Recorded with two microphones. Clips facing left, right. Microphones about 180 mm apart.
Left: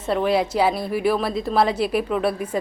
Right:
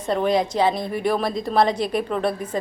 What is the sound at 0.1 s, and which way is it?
A woman's voice, 5° left (ahead or behind).